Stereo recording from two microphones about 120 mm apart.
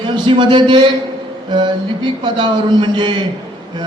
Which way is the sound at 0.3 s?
45° right (ahead or behind).